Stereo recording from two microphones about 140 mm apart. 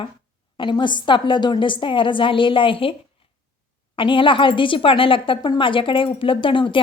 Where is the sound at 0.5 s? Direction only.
35° left (ahead or behind).